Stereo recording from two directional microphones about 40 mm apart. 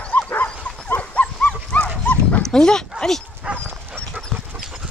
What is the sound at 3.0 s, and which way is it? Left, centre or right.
Dog, centre.